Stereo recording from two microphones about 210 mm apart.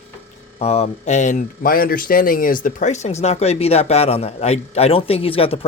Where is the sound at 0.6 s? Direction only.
30° left (ahead or behind).